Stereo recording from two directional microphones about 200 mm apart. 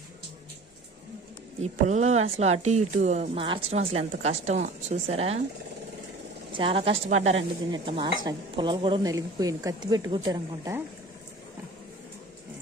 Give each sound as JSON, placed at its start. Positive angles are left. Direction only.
{"t": 1.6, "sound": "a woman's voice", "side_deg": -35}
{"t": 6.5, "sound": "a woman's voice", "side_deg": -25}